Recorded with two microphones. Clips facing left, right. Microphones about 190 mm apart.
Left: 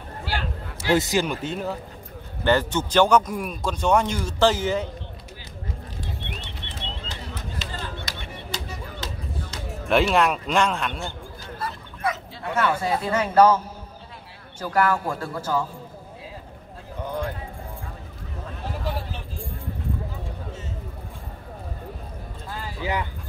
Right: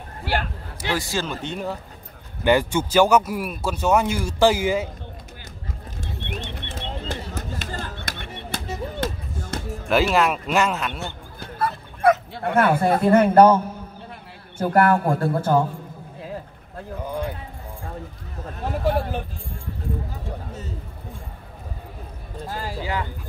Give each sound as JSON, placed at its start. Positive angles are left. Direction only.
{"t": 0.2, "sound": "speech", "side_deg": -55}
{"t": 0.9, "sound": "speech", "side_deg": 20}
{"t": 2.4, "sound": "a man's voice", "side_deg": -10}
{"t": 6.2, "sound": "bird", "side_deg": -45}
{"t": 9.0, "sound": "music", "side_deg": -55}
{"t": 9.8, "sound": "speech", "side_deg": 0}
{"t": 11.3, "sound": "bow-wow", "side_deg": -55}
{"t": 14.6, "sound": "a man's voice", "side_deg": -55}
{"t": 18.7, "sound": "a sound", "side_deg": -55}